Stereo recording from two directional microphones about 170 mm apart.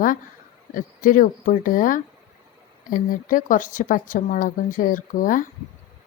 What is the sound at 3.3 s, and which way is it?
Speech, 50° left (ahead or behind).